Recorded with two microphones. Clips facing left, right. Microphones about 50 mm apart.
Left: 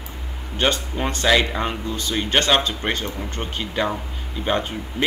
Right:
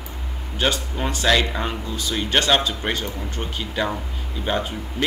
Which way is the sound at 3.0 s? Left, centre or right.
Left.